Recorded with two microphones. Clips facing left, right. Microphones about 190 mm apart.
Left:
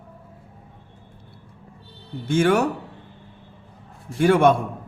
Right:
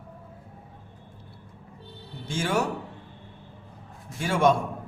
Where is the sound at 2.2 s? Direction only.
60° left (ahead or behind).